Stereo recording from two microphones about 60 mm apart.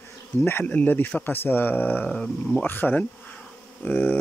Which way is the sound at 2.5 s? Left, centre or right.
Left.